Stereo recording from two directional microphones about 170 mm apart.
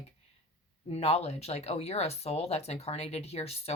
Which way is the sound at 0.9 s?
40° left (ahead or behind).